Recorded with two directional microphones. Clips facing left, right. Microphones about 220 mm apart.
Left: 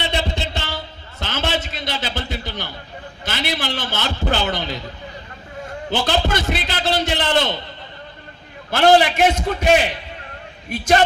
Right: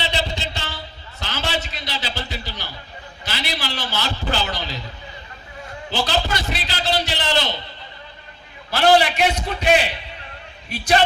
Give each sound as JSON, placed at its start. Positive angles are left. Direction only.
{"t": 0.1, "sound": "a sound", "side_deg": 55}
{"t": 3.2, "sound": "a man's voice", "side_deg": 50}
{"t": 5.9, "sound": "a man's voice", "side_deg": 50}
{"t": 8.7, "sound": "a man's voice", "side_deg": 50}